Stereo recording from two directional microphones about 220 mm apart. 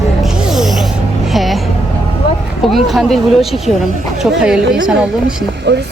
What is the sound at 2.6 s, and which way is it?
Speech, centre (ahead or behind).